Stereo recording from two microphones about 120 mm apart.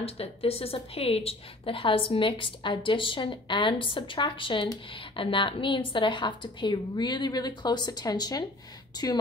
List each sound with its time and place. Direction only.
0.0 s a woman's voice: 55° left (ahead or behind); by 9.2 s 35° left (ahead or behind)